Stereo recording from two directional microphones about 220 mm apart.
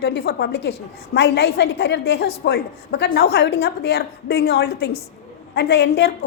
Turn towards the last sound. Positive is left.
turn(degrees=50)  # may be behind; listen again after turning